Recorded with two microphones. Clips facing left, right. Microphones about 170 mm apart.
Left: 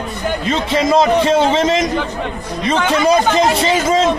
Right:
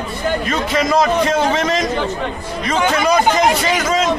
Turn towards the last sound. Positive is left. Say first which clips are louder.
# left 3 dB
turn(degrees=25)  # may be behind; listen again after turning